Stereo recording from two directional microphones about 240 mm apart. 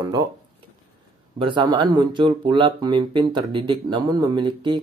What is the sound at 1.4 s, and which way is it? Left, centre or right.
Speech, centre.